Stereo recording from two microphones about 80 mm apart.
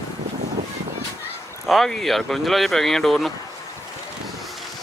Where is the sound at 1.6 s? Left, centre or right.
Centre.